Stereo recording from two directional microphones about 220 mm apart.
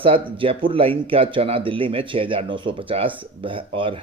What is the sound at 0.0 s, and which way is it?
Speech, 25° right (ahead or behind).